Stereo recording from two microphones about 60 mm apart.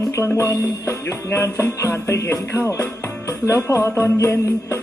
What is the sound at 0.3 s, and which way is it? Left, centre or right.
Music, left.